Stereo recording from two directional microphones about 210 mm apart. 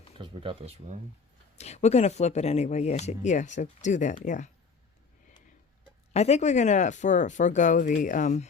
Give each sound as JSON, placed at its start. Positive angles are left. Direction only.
{"t": 0.2, "sound": "speech", "side_deg": -25}
{"t": 1.5, "sound": "speech", "side_deg": 30}
{"t": 6.1, "sound": "speech", "side_deg": 30}